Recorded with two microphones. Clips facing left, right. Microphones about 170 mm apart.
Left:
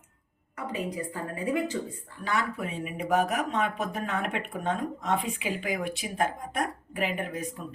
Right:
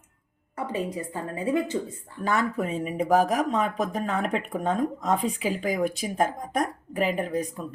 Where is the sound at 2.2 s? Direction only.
45° right (ahead or behind).